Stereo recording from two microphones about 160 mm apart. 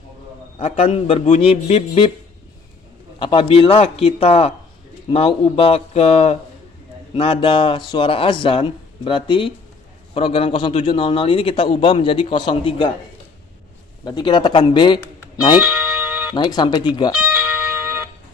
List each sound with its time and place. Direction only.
0.6 s a man's voice: 40° left (ahead or behind)
3.2 s a man's voice: 35° left (ahead or behind)
14.0 s speech: 25° left (ahead or behind)
15.6 s music: 10° right (ahead or behind)
16.4 s speech: 25° left (ahead or behind)
17.2 s music: 10° right (ahead or behind)